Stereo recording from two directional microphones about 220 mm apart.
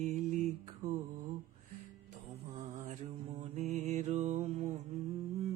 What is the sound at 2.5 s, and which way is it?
Mantra, 35° right (ahead or behind).